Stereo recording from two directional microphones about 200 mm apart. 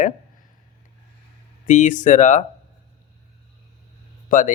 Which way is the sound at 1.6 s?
40° left (ahead or behind).